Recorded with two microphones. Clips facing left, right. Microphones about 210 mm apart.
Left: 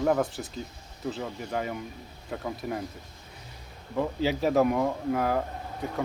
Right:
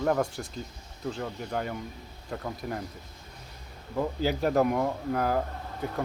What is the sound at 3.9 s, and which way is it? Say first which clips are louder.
Speech: left 1 dB; centre (ahead or behind).